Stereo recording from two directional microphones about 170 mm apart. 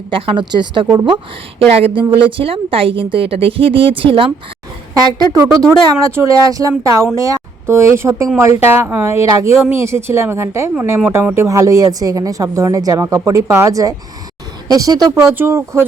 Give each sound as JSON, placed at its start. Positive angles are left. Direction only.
{"t": 0.1, "sound": "a woman's voice", "side_deg": -30}
{"t": 6.0, "sound": "a woman's voice", "side_deg": -20}